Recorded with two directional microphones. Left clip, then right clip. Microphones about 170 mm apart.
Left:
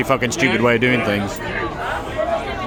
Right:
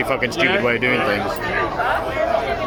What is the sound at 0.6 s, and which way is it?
Speech, 40° left (ahead or behind).